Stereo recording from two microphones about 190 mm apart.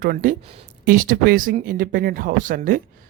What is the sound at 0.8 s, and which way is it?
Speech, 45° right (ahead or behind).